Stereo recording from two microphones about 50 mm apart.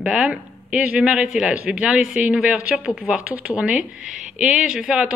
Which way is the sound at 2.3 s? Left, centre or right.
Right.